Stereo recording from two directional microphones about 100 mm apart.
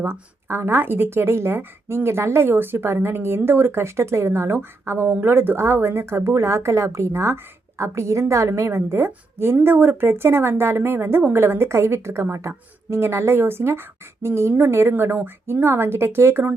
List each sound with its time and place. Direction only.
0.0 s a woman's voice: 25° right (ahead or behind)